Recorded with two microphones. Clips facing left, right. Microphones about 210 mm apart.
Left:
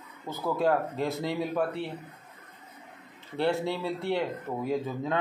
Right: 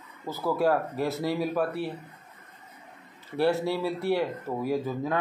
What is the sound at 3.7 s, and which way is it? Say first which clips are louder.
A man's voice: right 3 dB; 20° left (ahead or behind).